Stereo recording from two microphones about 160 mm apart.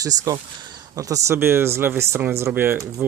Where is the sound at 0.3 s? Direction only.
20° right (ahead or behind).